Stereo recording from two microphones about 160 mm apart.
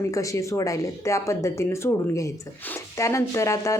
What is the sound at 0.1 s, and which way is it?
A woman's voice, 20° left (ahead or behind).